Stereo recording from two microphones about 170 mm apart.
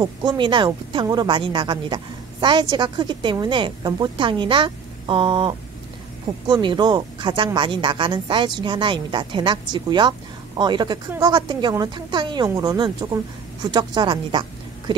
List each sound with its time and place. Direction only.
0.0 s a woman's voice: 25° right (ahead or behind)